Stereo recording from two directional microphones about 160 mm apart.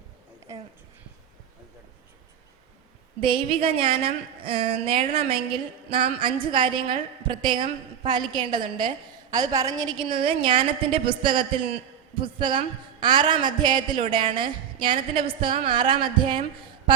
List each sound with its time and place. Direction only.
3.2 s a man's voice: 35° right (ahead or behind)